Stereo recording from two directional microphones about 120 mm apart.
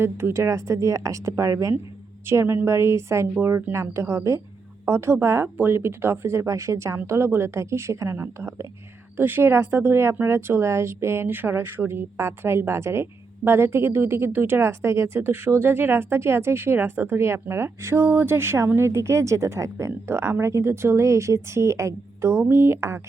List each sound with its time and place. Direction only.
0.0 s speech: 20° right (ahead or behind)